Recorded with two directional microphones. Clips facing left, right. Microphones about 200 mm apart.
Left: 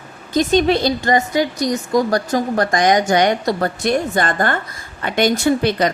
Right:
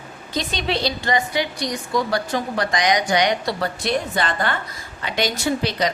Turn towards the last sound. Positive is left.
turn(degrees=55)  # may be behind; listen again after turning